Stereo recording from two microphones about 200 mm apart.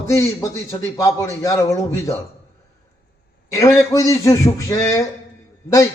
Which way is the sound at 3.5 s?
15° left (ahead or behind).